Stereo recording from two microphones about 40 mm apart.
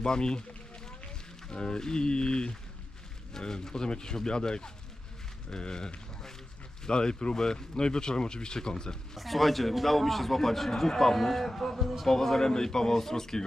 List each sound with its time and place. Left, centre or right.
0.0 s speech: centre
9.1 s a man's voice: centre
12.0 s speech: centre